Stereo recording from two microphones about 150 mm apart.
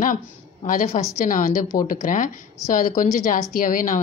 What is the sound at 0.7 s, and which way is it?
A woman's voice, 65° left (ahead or behind).